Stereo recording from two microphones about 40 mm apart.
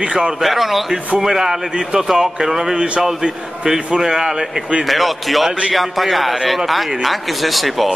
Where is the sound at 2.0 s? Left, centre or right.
Centre.